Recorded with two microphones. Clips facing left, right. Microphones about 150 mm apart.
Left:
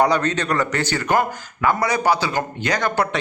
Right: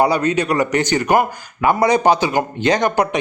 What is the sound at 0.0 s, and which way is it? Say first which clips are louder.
Speech: right 3 dB; 10° right (ahead or behind).